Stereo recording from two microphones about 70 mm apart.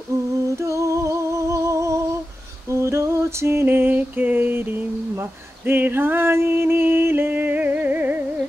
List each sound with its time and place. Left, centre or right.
0.6 s humming: right
2.7 s female singing: right
5.7 s music: right